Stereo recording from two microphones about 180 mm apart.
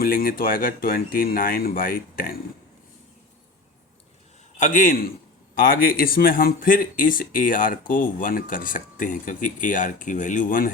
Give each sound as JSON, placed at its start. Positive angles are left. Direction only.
{"t": 0.0, "sound": "speech", "side_deg": 55}
{"t": 4.5, "sound": "speech", "side_deg": 45}